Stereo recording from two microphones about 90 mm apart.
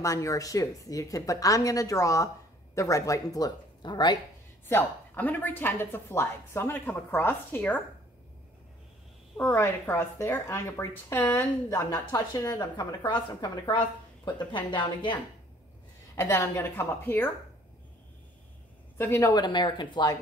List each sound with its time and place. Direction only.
0.0 s a woman's voice: 35° left (ahead or behind); by 4.2 s 55° left (ahead or behind)
4.6 s speech: 25° left (ahead or behind)
9.4 s a woman's voice: 30° left (ahead or behind)
12.4 s a woman's voice: 45° left (ahead or behind)
16.2 s speech: 30° left (ahead or behind)
18.9 s speech: 30° left (ahead or behind)
19.3 s a woman's voice: 55° left (ahead or behind)